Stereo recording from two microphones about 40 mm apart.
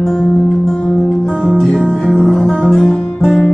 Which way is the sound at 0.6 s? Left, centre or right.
Centre.